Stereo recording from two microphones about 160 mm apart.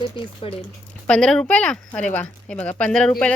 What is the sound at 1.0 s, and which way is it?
A woman's voice, 5° left (ahead or behind).